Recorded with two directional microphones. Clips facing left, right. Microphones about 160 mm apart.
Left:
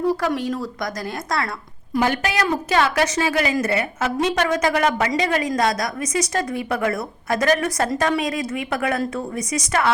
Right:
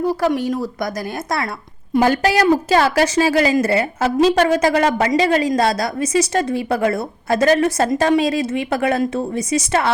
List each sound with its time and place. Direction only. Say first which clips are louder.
0.0 s a woman's voice: right 2 dB; 25° right (ahead or behind)
1.9 s a woman's voice: right 6 dB; 35° right (ahead or behind)